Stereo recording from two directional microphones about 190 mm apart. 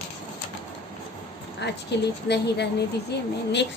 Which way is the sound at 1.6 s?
65° left (ahead or behind).